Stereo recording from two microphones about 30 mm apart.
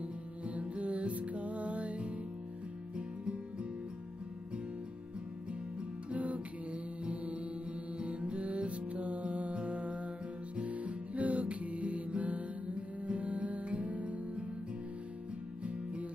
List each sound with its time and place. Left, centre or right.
0.6 s music: right
3.0 s music: right
5.5 s music: right
6.1 s music: right
15.6 s music: right